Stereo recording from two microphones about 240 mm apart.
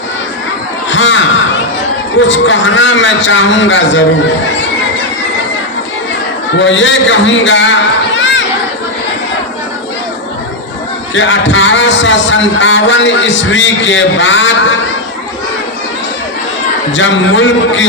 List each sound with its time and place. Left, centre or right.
0.9 s a sound: left
2.2 s a man's voice: left
6.6 s a man's voice: left
11.1 s a man's voice: left
16.9 s a man's voice: left